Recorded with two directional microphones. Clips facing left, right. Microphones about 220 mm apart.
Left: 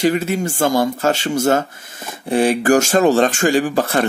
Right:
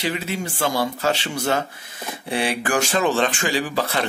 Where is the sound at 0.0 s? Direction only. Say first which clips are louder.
Left 9 dB; 45° left (ahead or behind).